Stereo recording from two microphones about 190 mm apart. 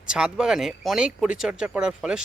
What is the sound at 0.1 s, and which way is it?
Speech, 5° right (ahead or behind).